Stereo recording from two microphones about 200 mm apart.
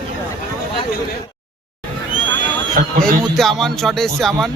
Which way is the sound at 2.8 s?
45° right (ahead or behind).